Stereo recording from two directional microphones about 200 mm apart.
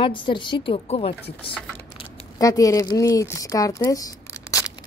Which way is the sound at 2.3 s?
15° left (ahead or behind).